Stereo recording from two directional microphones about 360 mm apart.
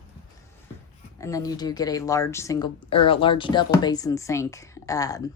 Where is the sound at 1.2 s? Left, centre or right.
Centre.